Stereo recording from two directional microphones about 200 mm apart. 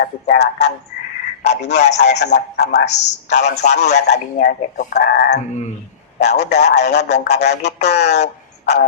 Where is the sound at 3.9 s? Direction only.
60° left (ahead or behind).